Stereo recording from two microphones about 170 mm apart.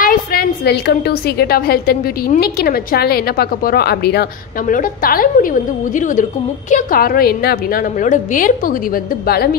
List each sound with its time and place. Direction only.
0.0 s a woman's voice: 60° left (ahead or behind)
4.7 s a woman's voice: 55° left (ahead or behind)